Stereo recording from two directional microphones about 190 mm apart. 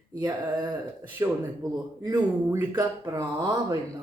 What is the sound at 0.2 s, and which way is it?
Speech, 20° right (ahead or behind).